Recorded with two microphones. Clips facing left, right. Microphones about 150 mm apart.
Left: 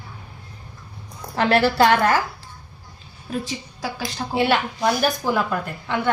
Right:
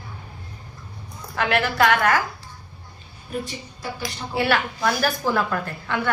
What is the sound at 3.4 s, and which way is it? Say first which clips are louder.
Speech: left 3 dB; 90° left.